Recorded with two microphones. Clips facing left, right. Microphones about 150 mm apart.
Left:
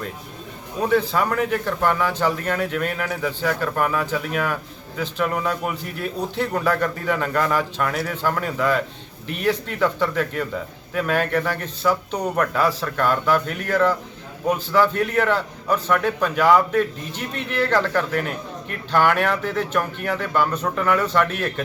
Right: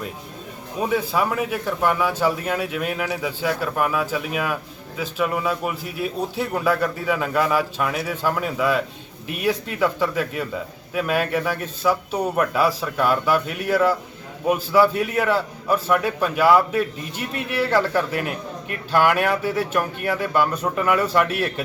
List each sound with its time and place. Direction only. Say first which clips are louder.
0.8 s speech: left 2 dB; 10° right (ahead or behind)